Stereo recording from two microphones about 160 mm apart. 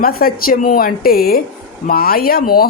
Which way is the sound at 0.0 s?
65° left (ahead or behind).